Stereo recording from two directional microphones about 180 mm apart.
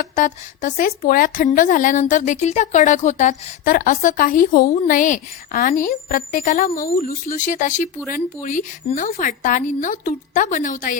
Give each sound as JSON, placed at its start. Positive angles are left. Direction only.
{"t": 0.2, "sound": "speech", "side_deg": 45}